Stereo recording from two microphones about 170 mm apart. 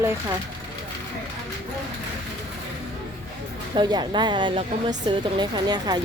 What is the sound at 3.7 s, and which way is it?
Speech, 25° right (ahead or behind).